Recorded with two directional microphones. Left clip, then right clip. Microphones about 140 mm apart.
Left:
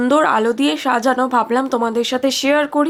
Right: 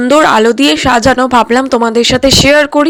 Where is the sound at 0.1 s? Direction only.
35° right (ahead or behind).